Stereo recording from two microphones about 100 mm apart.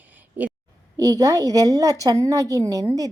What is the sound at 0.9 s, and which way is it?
A woman's voice, 40° right (ahead or behind).